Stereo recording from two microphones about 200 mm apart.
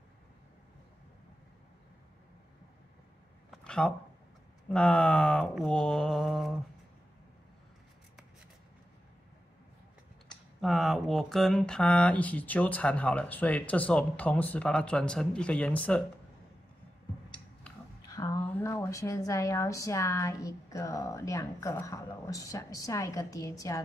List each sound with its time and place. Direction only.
3.4 s a sound: 5° left (ahead or behind)
4.6 s mantra: 5° left (ahead or behind)
10.6 s a woman's voice: centre (ahead or behind)
18.0 s a woman's voice: 15° left (ahead or behind)